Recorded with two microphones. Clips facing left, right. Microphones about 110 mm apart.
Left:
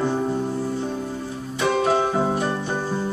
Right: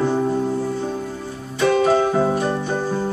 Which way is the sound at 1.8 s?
5° left (ahead or behind).